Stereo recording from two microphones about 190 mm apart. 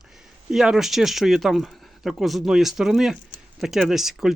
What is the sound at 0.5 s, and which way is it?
Speech, centre (ahead or behind).